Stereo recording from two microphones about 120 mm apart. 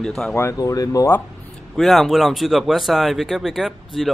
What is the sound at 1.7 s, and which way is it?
A man's voice, centre (ahead or behind).